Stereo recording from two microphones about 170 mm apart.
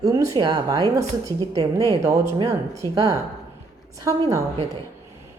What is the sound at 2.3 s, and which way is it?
Speech, 20° right (ahead or behind).